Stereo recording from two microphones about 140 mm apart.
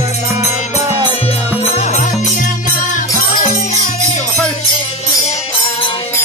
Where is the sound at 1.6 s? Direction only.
55° left (ahead or behind).